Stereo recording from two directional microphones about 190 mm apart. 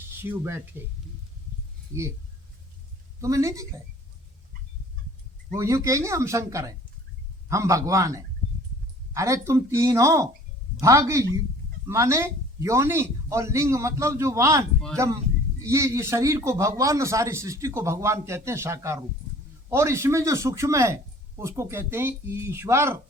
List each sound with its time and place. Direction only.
0.2 s a man's voice: 10° right (ahead or behind)
3.2 s a man's voice: 15° right (ahead or behind)
5.5 s a man's voice: 15° right (ahead or behind)